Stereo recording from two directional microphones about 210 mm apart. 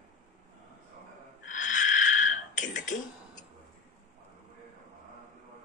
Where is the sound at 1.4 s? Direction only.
35° left (ahead or behind).